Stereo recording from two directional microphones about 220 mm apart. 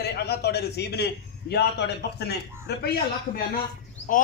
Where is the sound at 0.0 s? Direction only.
45° left (ahead or behind).